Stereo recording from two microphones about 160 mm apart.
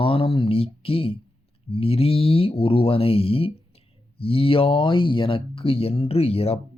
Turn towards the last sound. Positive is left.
turn(degrees=40)  # may be behind; listen again after turning